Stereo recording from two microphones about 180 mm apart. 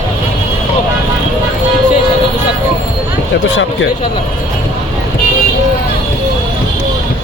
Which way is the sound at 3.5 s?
90° left.